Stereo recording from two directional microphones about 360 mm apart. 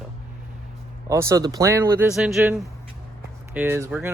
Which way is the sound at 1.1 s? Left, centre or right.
Centre.